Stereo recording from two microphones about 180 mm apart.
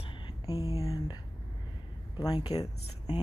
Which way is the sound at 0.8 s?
20° left (ahead or behind).